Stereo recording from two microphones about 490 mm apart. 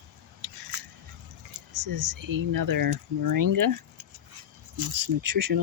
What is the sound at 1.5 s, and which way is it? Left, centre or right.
Speech, right.